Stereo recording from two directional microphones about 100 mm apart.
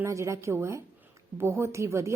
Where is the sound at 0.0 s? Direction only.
30° right (ahead or behind).